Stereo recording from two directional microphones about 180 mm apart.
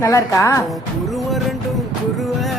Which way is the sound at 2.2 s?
Centre (ahead or behind).